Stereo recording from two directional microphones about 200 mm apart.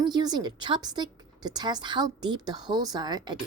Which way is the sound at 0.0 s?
20° right (ahead or behind).